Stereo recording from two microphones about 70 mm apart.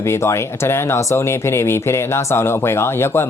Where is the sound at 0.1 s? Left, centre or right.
Left.